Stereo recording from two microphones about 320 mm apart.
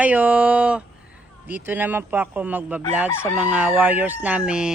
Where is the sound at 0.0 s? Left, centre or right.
Centre.